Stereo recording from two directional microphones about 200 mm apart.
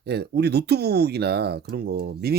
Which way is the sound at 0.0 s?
55° right (ahead or behind).